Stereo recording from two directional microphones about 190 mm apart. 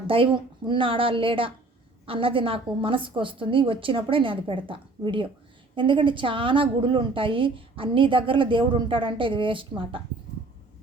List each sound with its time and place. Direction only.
0.1 s a woman's voice: 25° right (ahead or behind)